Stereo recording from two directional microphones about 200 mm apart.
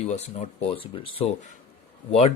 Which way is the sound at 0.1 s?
30° left (ahead or behind).